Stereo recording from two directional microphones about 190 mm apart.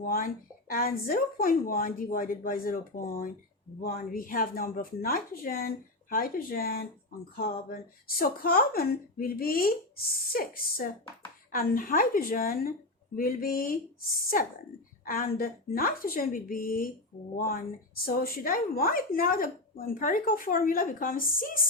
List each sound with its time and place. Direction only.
0.0 s a woman's voice: 50° left (ahead or behind)
15.0 s a woman's voice: 50° left (ahead or behind)